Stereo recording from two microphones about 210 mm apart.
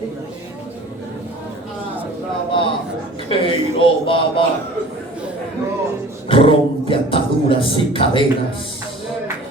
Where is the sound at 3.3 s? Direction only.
25° left (ahead or behind).